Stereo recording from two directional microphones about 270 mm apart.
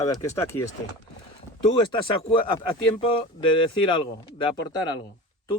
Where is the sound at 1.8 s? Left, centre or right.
Centre.